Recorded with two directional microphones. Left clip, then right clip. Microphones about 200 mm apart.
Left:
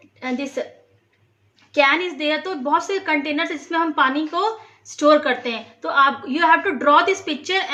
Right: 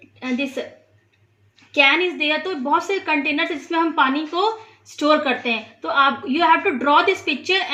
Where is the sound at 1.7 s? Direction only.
30° right (ahead or behind).